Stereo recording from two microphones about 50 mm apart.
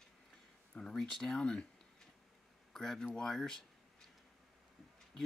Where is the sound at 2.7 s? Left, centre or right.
Centre.